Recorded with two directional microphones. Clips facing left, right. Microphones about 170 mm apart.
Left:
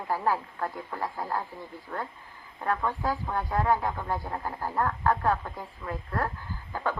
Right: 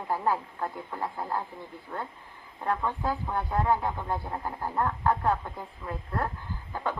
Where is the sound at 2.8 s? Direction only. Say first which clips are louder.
Left 1 dB; 20° right (ahead or behind).